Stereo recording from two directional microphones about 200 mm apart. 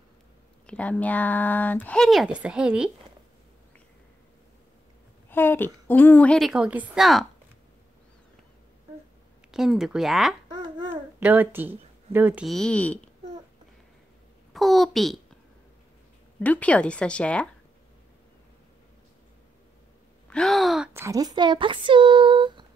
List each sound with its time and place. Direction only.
0.7 s speech: 5° left (ahead or behind)
5.3 s a woman's voice: 10° left (ahead or behind)
9.5 s a woman's voice: centre (ahead or behind)
10.5 s babbling: 20° right (ahead or behind)
10.9 s a child's voice: 10° right (ahead or behind); by 13.1 s 5° left (ahead or behind)
14.5 s a sound: centre (ahead or behind)
16.3 s a woman's voice: 5° left (ahead or behind)
20.2 s a woman's voice: 5° left (ahead or behind); by 22.7 s 25° right (ahead or behind)